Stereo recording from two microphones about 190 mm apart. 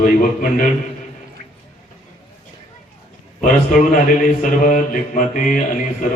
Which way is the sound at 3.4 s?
45° left (ahead or behind).